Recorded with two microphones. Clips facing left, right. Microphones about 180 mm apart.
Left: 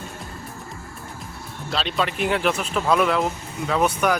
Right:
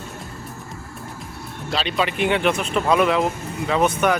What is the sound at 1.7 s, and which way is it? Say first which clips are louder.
Speech: right 2 dB; centre (ahead or behind).